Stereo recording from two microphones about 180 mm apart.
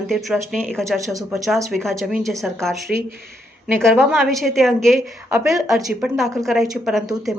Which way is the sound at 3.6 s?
10° right (ahead or behind).